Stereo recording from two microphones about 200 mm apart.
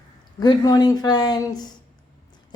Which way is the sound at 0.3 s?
20° left (ahead or behind).